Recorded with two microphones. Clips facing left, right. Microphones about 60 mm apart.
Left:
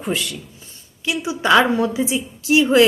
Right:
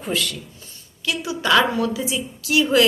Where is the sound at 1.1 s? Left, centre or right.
Left.